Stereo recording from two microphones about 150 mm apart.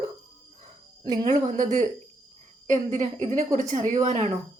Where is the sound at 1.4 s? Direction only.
50° right (ahead or behind).